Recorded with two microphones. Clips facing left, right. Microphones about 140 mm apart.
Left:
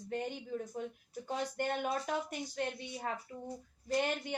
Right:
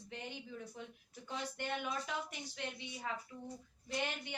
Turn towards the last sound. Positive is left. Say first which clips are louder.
# left 7 dB
turn(degrees=45)  # may be behind; listen again after turning